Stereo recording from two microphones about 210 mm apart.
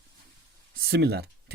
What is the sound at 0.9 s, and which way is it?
Speech, 50° right (ahead or behind).